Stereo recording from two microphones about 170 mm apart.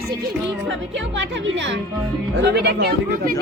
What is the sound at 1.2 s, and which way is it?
Speech, 90° right.